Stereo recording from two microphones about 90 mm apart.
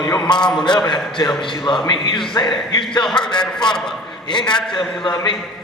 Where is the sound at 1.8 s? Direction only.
55° left (ahead or behind).